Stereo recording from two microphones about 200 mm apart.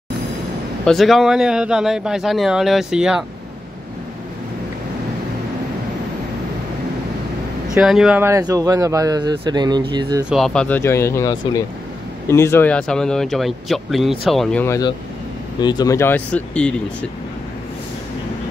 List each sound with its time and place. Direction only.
0.8 s speech: centre (ahead or behind)
7.7 s speech: centre (ahead or behind); by 10.2 s 20° right (ahead or behind)
10.3 s speech: 5° left (ahead or behind)